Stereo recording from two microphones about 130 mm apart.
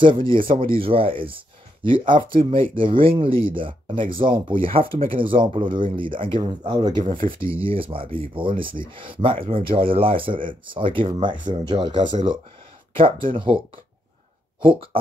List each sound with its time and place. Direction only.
0.0 s speech: 40° right (ahead or behind)
13.3 s speech: 40° right (ahead or behind)
14.6 s speech: 40° right (ahead or behind)